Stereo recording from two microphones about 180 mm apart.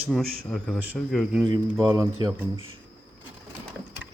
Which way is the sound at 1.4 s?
20° right (ahead or behind).